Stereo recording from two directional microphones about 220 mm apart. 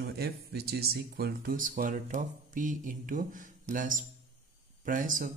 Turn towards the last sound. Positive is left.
turn(degrees=-40)  # may be behind; listen again after turning